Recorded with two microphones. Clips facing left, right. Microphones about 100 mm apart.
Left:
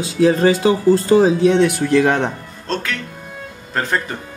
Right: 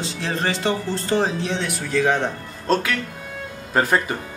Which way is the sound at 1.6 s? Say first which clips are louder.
Left 8 dB; 65° left (ahead or behind).